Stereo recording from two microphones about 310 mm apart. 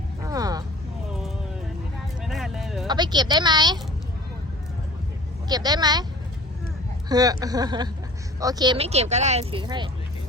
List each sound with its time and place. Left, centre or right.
0.2 s a sound: centre
2.2 s music: centre
2.8 s speech: centre
5.5 s speech: centre
7.1 s speech: centre